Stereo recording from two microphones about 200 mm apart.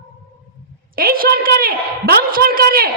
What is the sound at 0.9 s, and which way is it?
A woman's voice, 45° right (ahead or behind).